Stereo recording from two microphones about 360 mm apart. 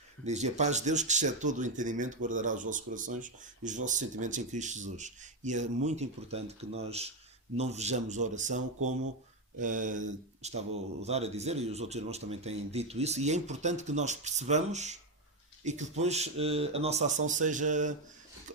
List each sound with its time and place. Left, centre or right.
0.3 s speech: centre